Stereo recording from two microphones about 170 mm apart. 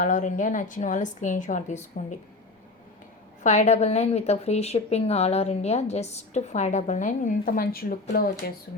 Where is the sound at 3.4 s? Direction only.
45° left (ahead or behind).